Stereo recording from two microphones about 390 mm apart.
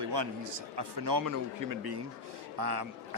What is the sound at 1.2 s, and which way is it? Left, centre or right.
A man's voice, right.